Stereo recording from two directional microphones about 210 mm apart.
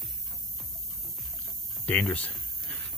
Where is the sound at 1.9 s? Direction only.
5° left (ahead or behind).